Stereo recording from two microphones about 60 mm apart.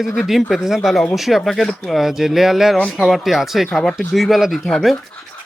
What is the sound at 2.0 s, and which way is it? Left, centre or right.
Speech, centre.